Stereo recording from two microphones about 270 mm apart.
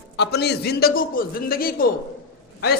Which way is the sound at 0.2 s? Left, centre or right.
Left.